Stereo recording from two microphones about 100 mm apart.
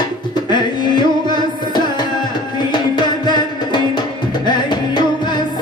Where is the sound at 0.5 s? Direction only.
50° left (ahead or behind).